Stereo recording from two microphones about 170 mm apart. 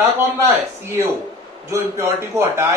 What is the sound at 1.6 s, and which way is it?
A man's voice, 15° right (ahead or behind).